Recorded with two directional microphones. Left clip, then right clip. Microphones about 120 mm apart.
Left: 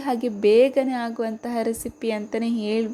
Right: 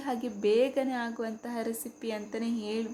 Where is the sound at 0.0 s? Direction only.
40° left (ahead or behind).